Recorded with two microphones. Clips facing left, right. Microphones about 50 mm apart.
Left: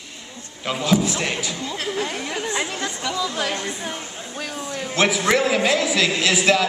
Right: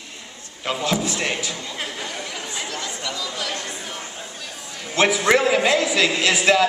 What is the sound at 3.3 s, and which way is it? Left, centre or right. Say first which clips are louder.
Speech: left 3 dB; left.